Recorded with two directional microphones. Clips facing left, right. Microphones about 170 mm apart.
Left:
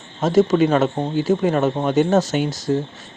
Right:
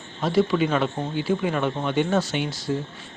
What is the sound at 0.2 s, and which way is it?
Speech, 45° left (ahead or behind).